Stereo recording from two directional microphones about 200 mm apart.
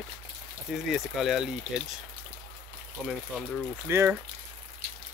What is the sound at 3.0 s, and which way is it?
Speech, centre (ahead or behind).